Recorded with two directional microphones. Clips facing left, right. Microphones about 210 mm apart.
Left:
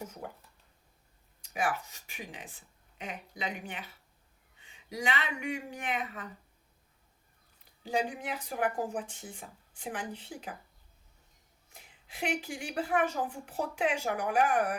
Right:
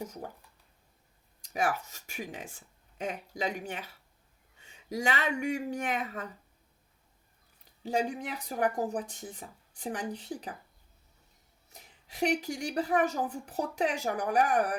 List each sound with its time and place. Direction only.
1.5 s speech: 40° right (ahead or behind)
7.9 s a woman's voice: 40° right (ahead or behind)
11.7 s a woman's voice: 40° right (ahead or behind)